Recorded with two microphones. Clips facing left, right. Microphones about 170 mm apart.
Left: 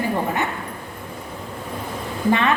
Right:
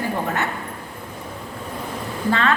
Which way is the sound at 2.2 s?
15° left (ahead or behind).